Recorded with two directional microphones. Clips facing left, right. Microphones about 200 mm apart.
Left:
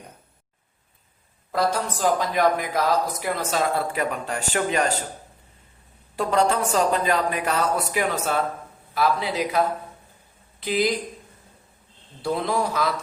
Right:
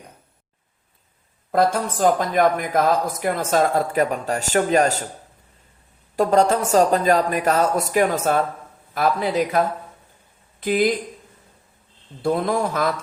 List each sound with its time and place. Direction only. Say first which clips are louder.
1.5 s speech: right 4 dB; 50° right (ahead or behind)
6.1 s speech: right 4 dB; 40° right (ahead or behind)
10.6 s speech: right 4 dB; 50° right (ahead or behind)
12.2 s speech: right 3 dB; 50° right (ahead or behind)